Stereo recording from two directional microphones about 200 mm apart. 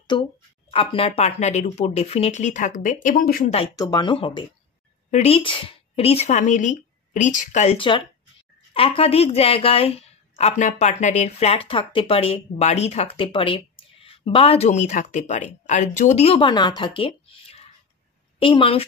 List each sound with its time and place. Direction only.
0.1 s a woman's voice: 25° left (ahead or behind); by 3.5 s 45° left (ahead or behind)
3.7 s a woman's voice: 20° left (ahead or behind)